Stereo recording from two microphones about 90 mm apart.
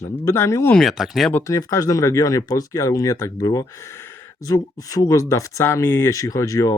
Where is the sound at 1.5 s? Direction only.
35° left (ahead or behind).